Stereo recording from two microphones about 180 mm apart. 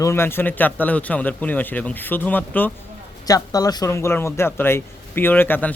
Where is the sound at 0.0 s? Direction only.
15° left (ahead or behind).